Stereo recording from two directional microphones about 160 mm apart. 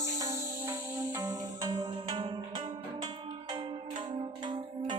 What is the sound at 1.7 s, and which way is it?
Music, 30° right (ahead or behind).